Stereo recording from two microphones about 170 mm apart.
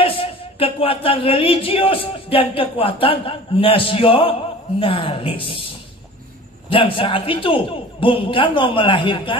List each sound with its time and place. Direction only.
0.0 s speech: 35° left (ahead or behind)
6.7 s speech: 30° left (ahead or behind)